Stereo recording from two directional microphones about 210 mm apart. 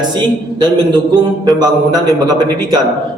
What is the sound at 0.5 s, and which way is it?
Speech, 20° right (ahead or behind).